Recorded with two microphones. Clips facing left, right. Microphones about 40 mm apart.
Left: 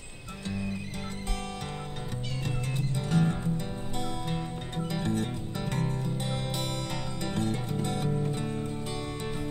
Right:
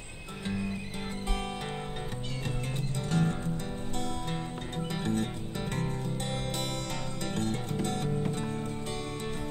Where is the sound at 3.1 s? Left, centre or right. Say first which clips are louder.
Left 2 dB; centre.